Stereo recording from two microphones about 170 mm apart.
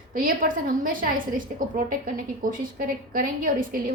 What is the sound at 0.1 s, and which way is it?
A woman's voice, 55° right (ahead or behind).